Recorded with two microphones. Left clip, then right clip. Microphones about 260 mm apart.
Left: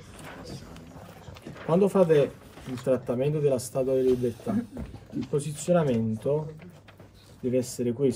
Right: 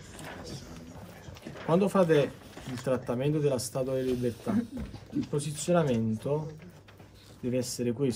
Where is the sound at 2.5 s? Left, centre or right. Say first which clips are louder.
Left 2 dB; right.